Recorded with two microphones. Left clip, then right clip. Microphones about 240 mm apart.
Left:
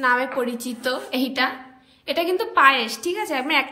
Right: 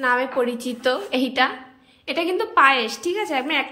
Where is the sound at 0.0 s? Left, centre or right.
Centre.